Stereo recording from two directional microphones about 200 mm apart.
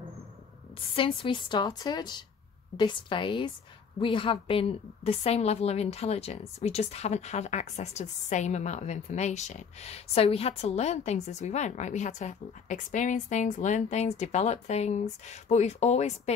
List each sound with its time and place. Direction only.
0.9 s a woman's voice: 25° left (ahead or behind)